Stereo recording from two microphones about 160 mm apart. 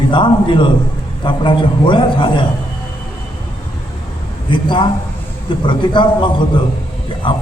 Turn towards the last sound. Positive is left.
turn(degrees=30)  # may be behind; listen again after turning